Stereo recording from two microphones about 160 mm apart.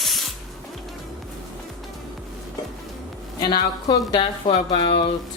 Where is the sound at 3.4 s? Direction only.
30° left (ahead or behind).